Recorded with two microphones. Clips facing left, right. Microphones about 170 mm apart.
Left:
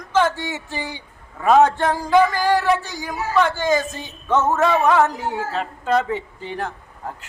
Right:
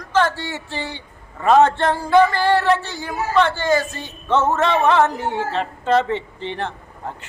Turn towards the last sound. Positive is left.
turn(degrees=5)  # may be behind; listen again after turning